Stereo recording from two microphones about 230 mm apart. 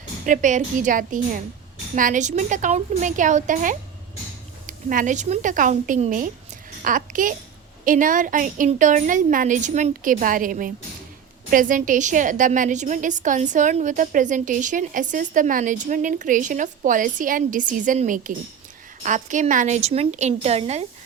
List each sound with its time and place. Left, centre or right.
0.3 s a woman's voice: right